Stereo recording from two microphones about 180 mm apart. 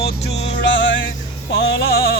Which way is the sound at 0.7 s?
90° left.